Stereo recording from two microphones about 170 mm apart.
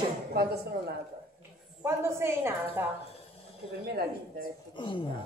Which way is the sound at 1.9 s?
15° right (ahead or behind).